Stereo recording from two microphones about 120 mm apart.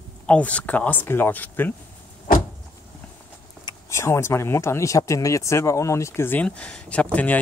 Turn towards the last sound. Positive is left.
turn(degrees=15)  # may be behind; listen again after turning